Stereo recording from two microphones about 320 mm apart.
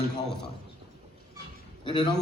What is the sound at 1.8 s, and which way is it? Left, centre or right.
Speech, centre.